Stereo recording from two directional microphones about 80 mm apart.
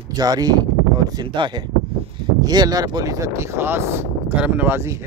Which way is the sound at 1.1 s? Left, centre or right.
Right.